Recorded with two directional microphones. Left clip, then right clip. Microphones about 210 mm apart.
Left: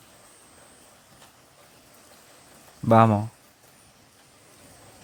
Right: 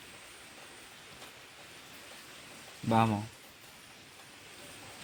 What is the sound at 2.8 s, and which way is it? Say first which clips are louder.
Speech: left 11 dB; 55° left (ahead or behind).